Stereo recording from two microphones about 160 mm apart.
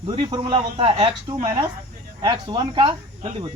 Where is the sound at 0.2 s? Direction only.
30° right (ahead or behind).